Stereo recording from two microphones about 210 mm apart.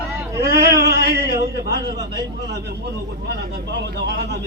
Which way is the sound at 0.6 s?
50° right (ahead or behind).